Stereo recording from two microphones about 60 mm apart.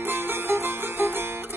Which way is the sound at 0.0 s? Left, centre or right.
Right.